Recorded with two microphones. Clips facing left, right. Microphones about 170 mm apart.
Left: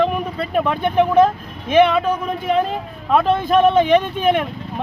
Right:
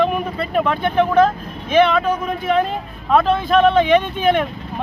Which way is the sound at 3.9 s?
Centre (ahead or behind).